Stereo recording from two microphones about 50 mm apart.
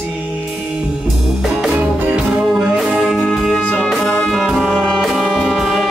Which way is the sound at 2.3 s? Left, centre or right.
Centre.